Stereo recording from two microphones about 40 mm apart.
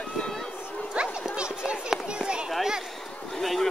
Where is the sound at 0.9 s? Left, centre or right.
Right.